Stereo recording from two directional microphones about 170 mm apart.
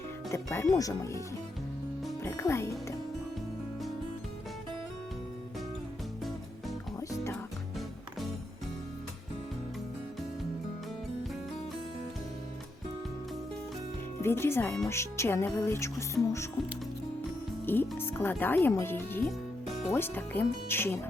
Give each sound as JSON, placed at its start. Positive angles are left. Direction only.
{"t": 0.3, "sound": "music", "side_deg": 15}
{"t": 2.2, "sound": "music", "side_deg": 15}
{"t": 14.2, "sound": "speech", "side_deg": 15}
{"t": 14.8, "sound": "music", "side_deg": 15}
{"t": 17.7, "sound": "music", "side_deg": 10}